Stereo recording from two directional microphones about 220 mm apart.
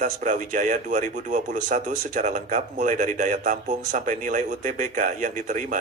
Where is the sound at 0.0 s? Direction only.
35° right (ahead or behind).